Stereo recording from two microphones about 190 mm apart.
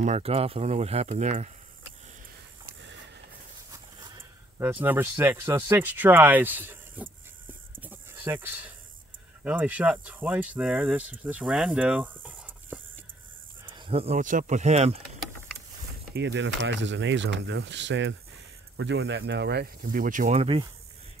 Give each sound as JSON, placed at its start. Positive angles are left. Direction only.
{"t": 0.0, "sound": "speech", "side_deg": -35}
{"t": 2.6, "sound": "snort", "side_deg": -70}
{"t": 3.7, "sound": "speech", "side_deg": -20}
{"t": 7.8, "sound": "a sound", "side_deg": -10}
{"t": 9.4, "sound": "speech", "side_deg": -10}
{"t": 13.7, "sound": "speech", "side_deg": -25}
{"t": 16.2, "sound": "speech", "side_deg": -70}